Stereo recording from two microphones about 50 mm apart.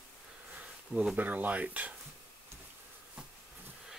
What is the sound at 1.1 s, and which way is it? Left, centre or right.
Speech, right.